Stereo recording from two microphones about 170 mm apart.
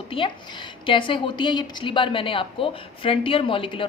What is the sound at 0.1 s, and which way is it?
A woman's voice, 30° left (ahead or behind).